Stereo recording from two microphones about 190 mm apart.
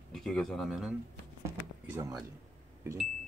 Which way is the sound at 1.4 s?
15° right (ahead or behind).